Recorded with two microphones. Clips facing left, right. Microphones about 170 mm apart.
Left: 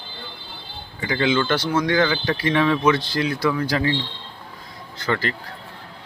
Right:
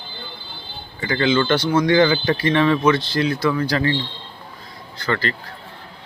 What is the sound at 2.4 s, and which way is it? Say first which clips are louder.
Speech: right 1 dB; 5° left (ahead or behind).